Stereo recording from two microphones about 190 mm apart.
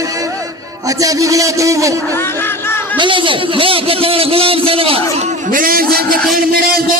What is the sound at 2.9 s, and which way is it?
A man's voice, 25° right (ahead or behind).